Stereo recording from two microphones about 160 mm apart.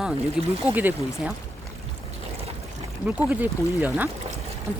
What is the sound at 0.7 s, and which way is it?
Speech, 10° right (ahead or behind).